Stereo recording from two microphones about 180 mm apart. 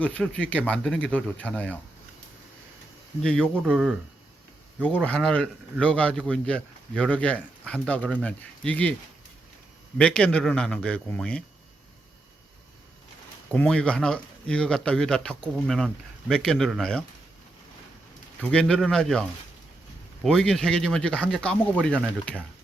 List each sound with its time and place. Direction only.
0.0 s a man's voice: 5° left (ahead or behind)
3.2 s speech: 5° left (ahead or behind)
5.0 s a man's voice: 5° left (ahead or behind)
10.0 s speech: 5° left (ahead or behind)
13.5 s speech: 5° left (ahead or behind)
18.5 s speech: 5° left (ahead or behind)
20.2 s a man's voice: 5° left (ahead or behind)